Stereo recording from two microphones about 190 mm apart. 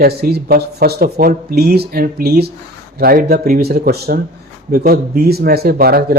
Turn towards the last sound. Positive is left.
turn(degrees=-50)  # may be behind; listen again after turning